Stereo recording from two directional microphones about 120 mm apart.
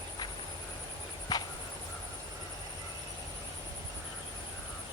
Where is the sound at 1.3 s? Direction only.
30° left (ahead or behind).